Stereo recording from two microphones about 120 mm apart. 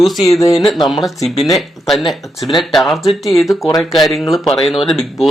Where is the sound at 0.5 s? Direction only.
Centre (ahead or behind).